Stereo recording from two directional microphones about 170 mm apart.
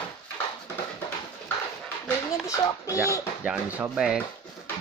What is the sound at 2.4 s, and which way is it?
Speech, 20° left (ahead or behind).